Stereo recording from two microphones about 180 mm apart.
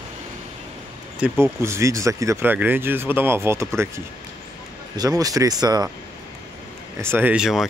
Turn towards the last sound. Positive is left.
turn(degrees=-5)  # may be behind; listen again after turning